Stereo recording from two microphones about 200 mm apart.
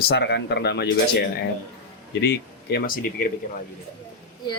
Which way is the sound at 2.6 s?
50° left (ahead or behind).